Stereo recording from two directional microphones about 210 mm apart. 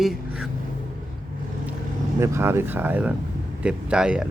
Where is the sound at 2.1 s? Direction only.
15° right (ahead or behind).